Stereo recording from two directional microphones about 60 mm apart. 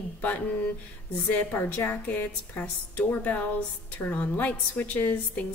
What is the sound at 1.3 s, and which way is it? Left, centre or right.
A woman's voice, left.